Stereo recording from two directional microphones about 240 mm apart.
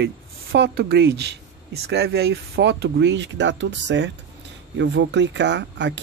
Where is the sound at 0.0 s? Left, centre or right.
Right.